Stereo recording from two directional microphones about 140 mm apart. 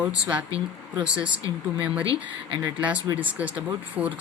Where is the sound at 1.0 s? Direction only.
35° right (ahead or behind).